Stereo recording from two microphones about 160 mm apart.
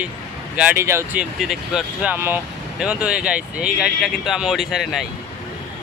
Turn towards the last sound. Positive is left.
turn(degrees=0)  # may be behind; listen again after turning